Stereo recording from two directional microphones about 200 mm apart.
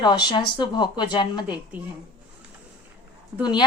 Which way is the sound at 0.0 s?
20° left (ahead or behind).